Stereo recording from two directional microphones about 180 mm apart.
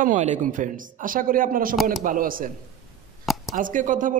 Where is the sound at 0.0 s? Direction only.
40° right (ahead or behind).